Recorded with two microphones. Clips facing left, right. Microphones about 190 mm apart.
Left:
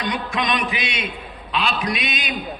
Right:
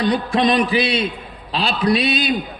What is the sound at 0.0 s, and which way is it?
A man's voice, 35° right (ahead or behind).